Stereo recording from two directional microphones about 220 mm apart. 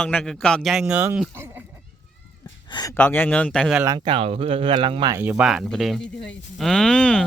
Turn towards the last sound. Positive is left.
turn(degrees=5)  # may be behind; listen again after turning